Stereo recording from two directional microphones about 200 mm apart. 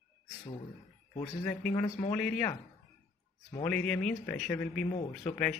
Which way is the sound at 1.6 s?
10° left (ahead or behind).